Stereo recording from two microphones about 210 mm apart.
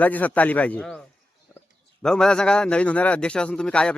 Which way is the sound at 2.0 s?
5° left (ahead or behind).